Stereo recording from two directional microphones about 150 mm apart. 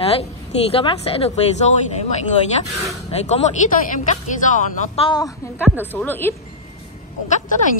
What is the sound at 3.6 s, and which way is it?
Speech, 55° left (ahead or behind).